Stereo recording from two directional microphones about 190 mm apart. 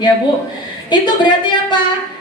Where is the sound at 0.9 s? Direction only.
25° left (ahead or behind).